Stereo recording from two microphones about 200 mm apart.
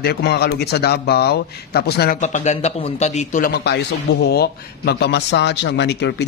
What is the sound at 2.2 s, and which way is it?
Speech, 35° left (ahead or behind).